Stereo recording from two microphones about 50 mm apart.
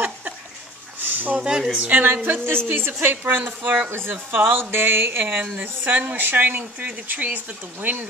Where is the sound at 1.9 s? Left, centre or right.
Right.